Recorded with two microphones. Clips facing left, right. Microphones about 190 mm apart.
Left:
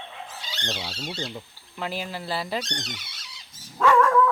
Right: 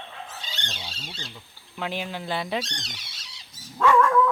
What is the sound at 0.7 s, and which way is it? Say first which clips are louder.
Speech: left 7 dB; 70° left (ahead or behind).